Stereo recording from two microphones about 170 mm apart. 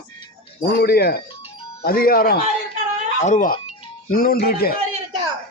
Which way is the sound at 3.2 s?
50° left (ahead or behind).